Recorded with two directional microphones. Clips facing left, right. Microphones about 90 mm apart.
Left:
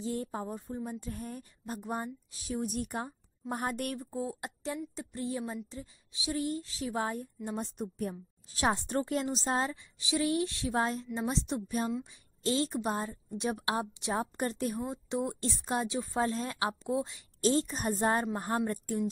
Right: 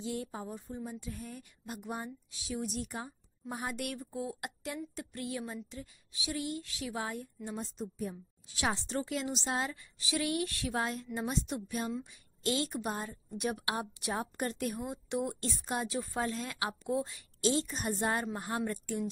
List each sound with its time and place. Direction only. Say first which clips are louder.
0.0 s a woman's voice: left 3 dB; 40° left (ahead or behind)
6.3 s speech: left 4 dB; 40° left (ahead or behind)
7.4 s a woman's voice: left 4 dB; 60° left (ahead or behind)
8.5 s speech: left 4 dB; 40° left (ahead or behind)
9.8 s a woman's voice: left 3 dB; 20° left (ahead or behind)
10.8 s a woman's voice: left 4 dB; 35° left (ahead or behind)
17.4 s speech: left 3 dB; 40° left (ahead or behind)